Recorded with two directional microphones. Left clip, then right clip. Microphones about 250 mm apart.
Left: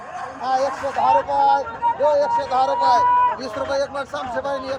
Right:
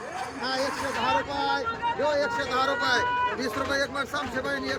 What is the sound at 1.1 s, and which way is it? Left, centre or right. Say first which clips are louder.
Speech: left 12 dB; centre.